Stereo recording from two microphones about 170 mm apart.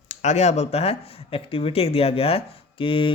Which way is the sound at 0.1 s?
45° left (ahead or behind).